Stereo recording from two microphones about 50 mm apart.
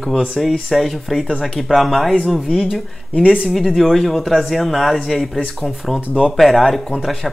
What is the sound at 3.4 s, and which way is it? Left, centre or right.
Speech, centre.